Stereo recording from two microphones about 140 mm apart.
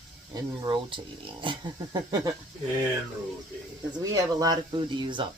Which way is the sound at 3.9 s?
30° right (ahead or behind).